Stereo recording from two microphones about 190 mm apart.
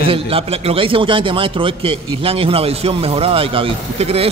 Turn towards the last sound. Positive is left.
turn(degrees=-30)  # may be behind; listen again after turning